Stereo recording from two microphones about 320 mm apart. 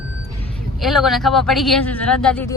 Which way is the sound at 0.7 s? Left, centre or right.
Centre.